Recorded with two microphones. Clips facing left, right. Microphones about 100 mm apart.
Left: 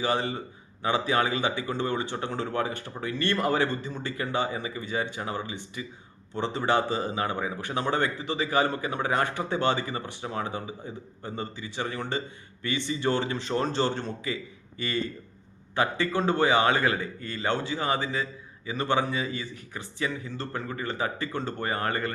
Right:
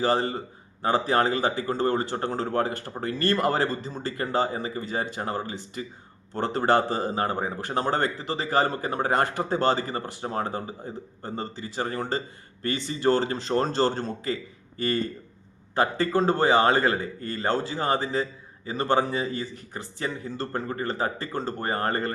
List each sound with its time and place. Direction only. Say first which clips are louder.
0.0 s a man's voice: right 3 dB; 40° right (ahead or behind)